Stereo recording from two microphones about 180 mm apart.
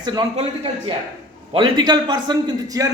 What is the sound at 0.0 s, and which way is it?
A man's voice, 25° right (ahead or behind).